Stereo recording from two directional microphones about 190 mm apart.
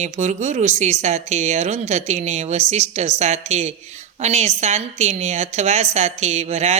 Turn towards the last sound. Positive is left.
turn(degrees=-35)  # may be behind; listen again after turning